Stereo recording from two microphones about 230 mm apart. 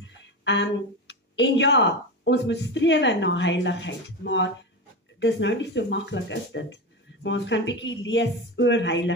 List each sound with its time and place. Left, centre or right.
0.0 s speech: left